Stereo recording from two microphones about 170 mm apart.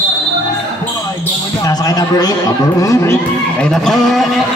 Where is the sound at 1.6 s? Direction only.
20° left (ahead or behind).